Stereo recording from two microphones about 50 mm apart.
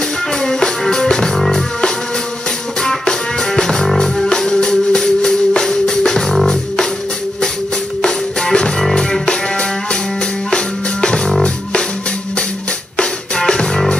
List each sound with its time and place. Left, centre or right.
0.3 s music: centre
2.8 s music: centre
8.0 s music: centre
12.9 s music: centre